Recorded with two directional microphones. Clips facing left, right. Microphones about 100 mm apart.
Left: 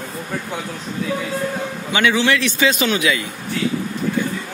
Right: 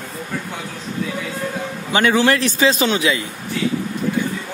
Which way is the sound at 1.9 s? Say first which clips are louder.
Right 2 dB; 40° right (ahead or behind).